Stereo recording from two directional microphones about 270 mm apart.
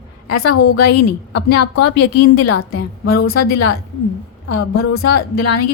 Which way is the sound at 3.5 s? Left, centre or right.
Left.